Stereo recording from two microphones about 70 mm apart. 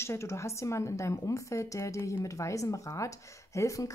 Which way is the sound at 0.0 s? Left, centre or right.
Left.